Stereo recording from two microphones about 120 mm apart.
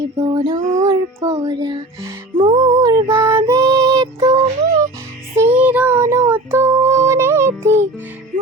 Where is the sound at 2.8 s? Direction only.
25° right (ahead or behind).